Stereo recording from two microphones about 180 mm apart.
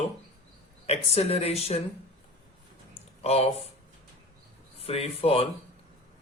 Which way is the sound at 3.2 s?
35° left (ahead or behind).